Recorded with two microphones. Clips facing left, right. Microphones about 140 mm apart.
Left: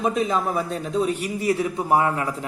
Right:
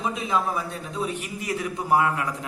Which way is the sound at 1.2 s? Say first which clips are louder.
Left 7 dB; 30° left (ahead or behind).